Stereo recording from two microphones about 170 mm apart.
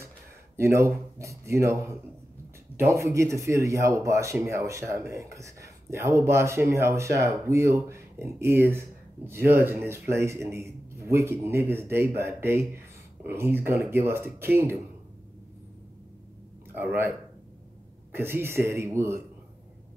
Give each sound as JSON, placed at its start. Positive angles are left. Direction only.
{"t": 0.6, "sound": "speech", "side_deg": -15}
{"t": 16.7, "sound": "speech", "side_deg": -10}
{"t": 18.1, "sound": "speech", "side_deg": -15}